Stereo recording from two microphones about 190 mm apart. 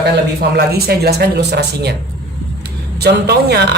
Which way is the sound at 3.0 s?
60° right (ahead or behind).